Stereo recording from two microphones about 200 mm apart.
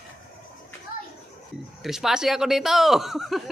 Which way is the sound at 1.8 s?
Centre (ahead or behind).